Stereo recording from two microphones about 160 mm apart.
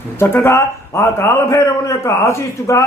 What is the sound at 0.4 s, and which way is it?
A man's voice, 15° left (ahead or behind).